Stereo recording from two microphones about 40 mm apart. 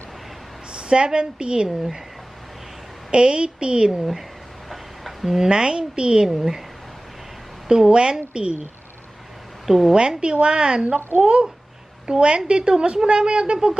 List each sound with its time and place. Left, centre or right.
0.7 s a woman's voice: right
1.6 s speech: centre
3.1 s a woman's voice: right
4.7 s a sound: centre
5.5 s a woman's voice: centre
6.2 s speech: centre
7.7 s a woman's voice: right
9.6 s a woman's voice: centre
9.9 s a woman's voice: right
11.1 s a child's voice: right
12.1 s a woman's voice: centre